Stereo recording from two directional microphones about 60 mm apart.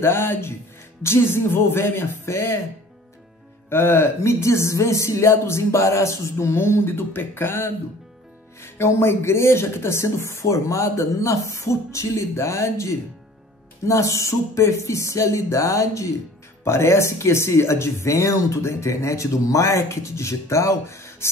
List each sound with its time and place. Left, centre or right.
0.0 s speech: left
2.2 s speech: left
3.7 s speech: left
13.8 s a sound: left
16.6 s speech: left